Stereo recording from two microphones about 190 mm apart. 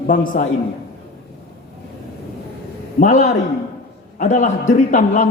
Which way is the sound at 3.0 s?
40° left (ahead or behind).